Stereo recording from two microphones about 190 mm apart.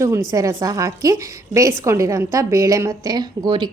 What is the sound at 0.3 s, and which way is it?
A woman's voice, 15° right (ahead or behind).